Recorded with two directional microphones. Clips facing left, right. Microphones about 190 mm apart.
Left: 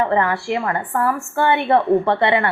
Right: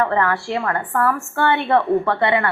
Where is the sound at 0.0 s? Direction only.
20° left (ahead or behind).